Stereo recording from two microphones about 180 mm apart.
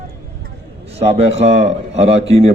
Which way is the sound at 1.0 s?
35° right (ahead or behind).